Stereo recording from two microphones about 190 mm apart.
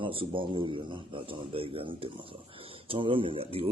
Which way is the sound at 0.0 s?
30° right (ahead or behind).